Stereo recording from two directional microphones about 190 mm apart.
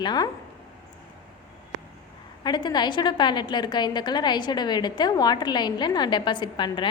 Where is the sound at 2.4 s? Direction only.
20° left (ahead or behind).